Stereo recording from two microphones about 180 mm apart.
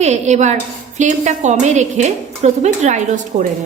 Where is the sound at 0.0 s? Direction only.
40° right (ahead or behind).